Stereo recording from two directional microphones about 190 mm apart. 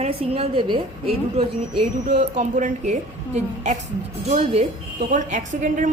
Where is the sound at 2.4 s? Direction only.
40° right (ahead or behind).